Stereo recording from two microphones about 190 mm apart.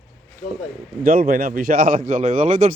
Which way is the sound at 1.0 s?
50° right (ahead or behind).